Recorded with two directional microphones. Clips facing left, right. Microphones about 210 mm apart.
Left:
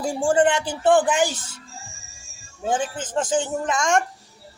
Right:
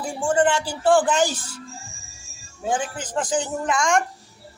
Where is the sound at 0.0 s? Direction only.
30° left (ahead or behind); by 1.4 s 15° left (ahead or behind).